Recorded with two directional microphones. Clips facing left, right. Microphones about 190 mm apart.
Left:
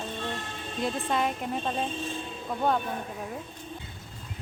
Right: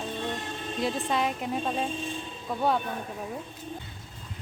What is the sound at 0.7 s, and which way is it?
Speech, centre (ahead or behind).